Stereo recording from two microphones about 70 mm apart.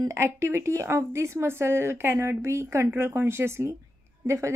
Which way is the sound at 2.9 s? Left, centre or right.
Right.